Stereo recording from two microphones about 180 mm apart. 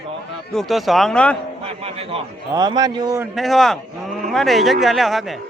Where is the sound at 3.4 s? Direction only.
Centre (ahead or behind).